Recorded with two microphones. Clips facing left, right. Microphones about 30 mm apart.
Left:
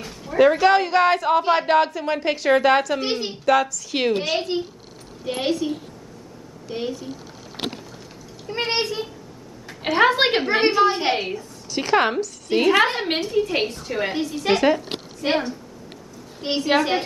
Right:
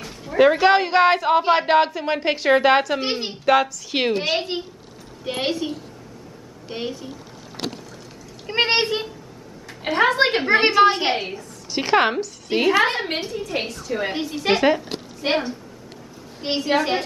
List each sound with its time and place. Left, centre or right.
0.0 s a sound: centre
0.4 s a child's voice: centre
6.7 s speech: centre
8.5 s a child's voice: right
9.9 s a woman's voice: centre
10.4 s a child's voice: centre
11.1 s a woman's voice: centre
11.7 s speech: centre
13.4 s a woman's voice: left
14.1 s speech: centre
16.6 s a woman's voice: centre